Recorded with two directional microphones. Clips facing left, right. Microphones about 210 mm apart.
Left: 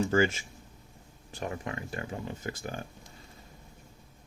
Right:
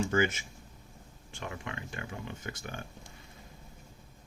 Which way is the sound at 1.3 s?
35° left (ahead or behind).